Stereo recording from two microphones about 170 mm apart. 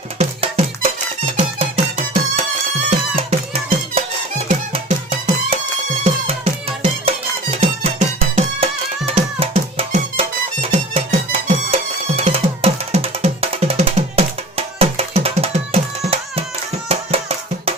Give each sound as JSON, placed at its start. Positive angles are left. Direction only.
{"t": 0.2, "sound": "music", "side_deg": -40}
{"t": 3.2, "sound": "music", "side_deg": -35}